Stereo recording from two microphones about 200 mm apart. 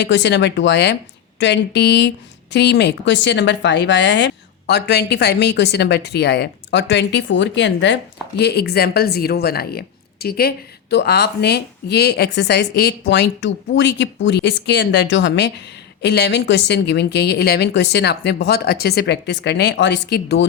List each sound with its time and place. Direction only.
0.0 s speech: 60° left (ahead or behind)